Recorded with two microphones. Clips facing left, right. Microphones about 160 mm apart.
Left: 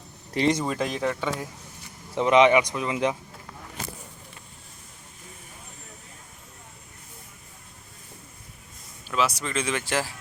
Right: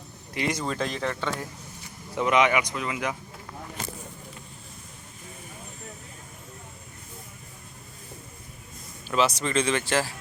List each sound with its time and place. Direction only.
0.3 s speech: 30° left (ahead or behind)
0.6 s speech: 10° left (ahead or behind)
2.1 s speech: 25° left (ahead or behind)
9.0 s speech: centre (ahead or behind)